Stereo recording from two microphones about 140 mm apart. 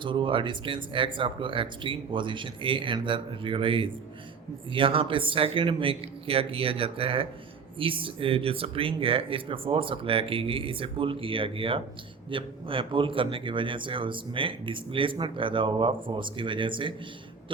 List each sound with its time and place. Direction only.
0.0 s speech: 35° right (ahead or behind)